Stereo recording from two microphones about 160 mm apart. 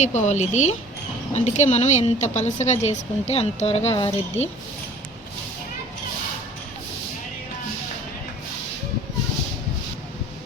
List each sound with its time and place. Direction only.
0.0 s a woman's voice: 45° left (ahead or behind)